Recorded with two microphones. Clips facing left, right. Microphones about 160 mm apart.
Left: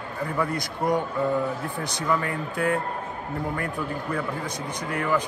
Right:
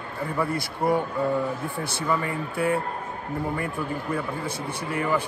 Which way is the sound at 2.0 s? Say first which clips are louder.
Left 1 dB; 5° right (ahead or behind).